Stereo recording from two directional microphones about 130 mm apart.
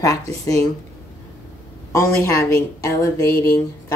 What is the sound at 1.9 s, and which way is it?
A woman's voice, 20° left (ahead or behind).